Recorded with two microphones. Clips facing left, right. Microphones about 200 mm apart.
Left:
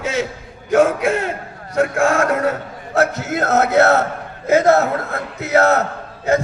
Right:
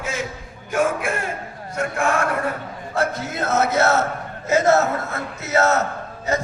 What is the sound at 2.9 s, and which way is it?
A man's voice, 70° left (ahead or behind).